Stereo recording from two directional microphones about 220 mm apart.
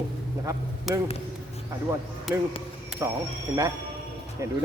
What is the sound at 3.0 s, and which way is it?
Speech, 15° right (ahead or behind).